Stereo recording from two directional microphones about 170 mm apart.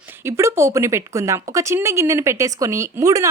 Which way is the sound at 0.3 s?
15° right (ahead or behind).